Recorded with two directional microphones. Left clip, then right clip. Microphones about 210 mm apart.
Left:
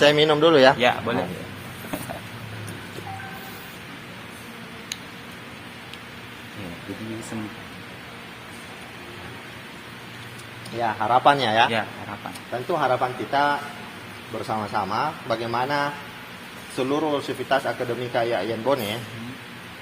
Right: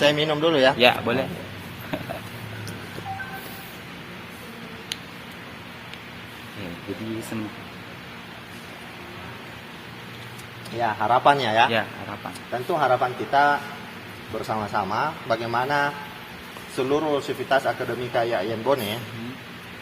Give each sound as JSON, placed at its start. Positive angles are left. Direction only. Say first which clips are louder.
{"t": 0.0, "sound": "speech", "louder": "left 4 dB", "side_deg": 20}
{"t": 0.8, "sound": "a man's voice", "louder": "right 2 dB", "side_deg": -25}
{"t": 10.8, "sound": "a man's voice", "louder": "even", "side_deg": 0}